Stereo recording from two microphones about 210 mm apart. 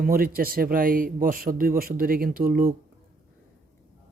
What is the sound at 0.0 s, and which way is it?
A man's voice, 45° right (ahead or behind).